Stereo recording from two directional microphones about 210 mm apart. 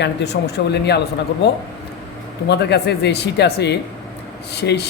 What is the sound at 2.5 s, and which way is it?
Speech, 55° left (ahead or behind).